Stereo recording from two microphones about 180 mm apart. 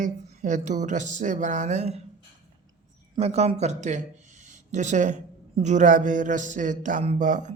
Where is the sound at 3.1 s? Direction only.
35° right (ahead or behind).